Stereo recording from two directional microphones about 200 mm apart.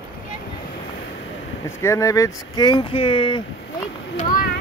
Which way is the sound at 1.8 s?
15° left (ahead or behind).